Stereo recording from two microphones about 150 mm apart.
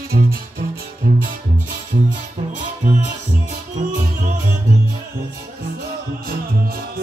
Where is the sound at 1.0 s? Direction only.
65° right (ahead or behind).